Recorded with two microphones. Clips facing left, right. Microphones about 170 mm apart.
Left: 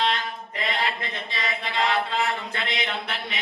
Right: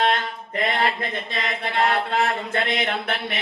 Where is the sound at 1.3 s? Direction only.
55° right (ahead or behind).